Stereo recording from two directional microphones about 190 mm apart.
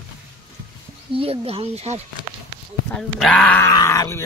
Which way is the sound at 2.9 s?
5° left (ahead or behind).